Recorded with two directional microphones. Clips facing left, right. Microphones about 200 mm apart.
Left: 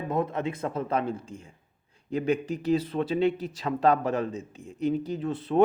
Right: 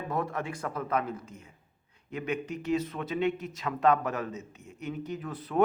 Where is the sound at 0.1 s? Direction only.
20° left (ahead or behind).